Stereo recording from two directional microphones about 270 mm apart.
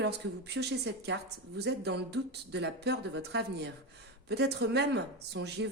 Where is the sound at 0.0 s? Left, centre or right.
Right.